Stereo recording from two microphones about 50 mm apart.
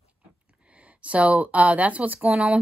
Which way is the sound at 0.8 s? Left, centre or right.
Right.